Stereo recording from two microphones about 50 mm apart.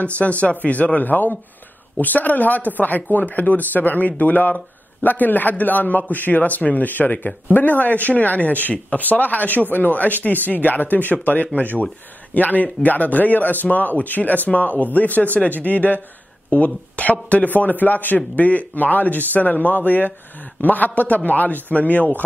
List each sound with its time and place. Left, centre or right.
0.0 s a man's voice: left